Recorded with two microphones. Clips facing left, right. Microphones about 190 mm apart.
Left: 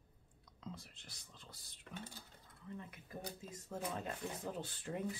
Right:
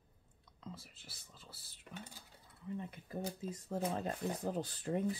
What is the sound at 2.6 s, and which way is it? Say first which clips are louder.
Speech: right 6 dB; 20° right (ahead or behind).